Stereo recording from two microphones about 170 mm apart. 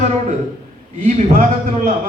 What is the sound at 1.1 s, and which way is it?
Speech, 45° right (ahead or behind).